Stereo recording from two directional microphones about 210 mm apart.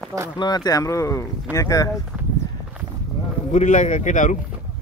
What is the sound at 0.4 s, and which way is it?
Speech, 20° left (ahead or behind).